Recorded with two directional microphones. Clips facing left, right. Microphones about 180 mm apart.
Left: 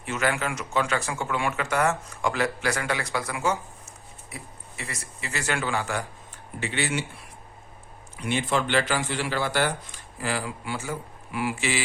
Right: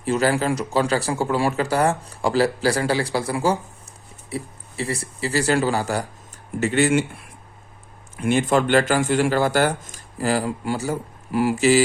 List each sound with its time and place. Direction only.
0.0 s speech: 35° right (ahead or behind)
8.1 s speech: 50° right (ahead or behind)